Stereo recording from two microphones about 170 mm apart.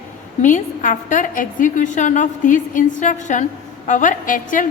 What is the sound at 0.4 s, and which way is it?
A woman's voice, 50° left (ahead or behind).